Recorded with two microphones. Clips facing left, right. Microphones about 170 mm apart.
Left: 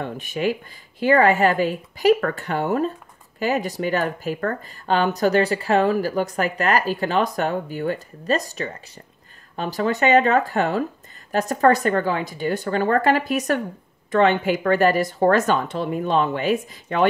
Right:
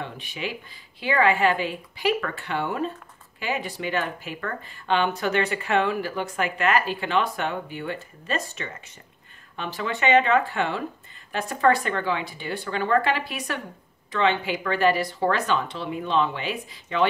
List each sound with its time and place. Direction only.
0.0 s speech: 45° left (ahead or behind)